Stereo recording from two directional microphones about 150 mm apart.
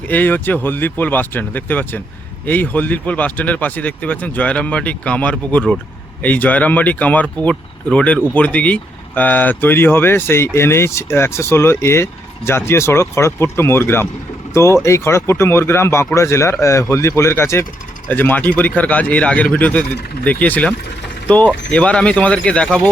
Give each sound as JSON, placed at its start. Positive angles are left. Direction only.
{"t": 0.1, "sound": "speech", "side_deg": 10}